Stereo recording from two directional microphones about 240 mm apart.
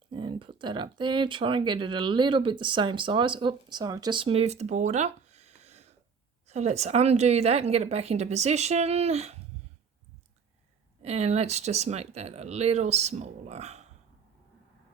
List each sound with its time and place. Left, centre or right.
0.1 s a woman's voice: centre
11.0 s a woman's voice: right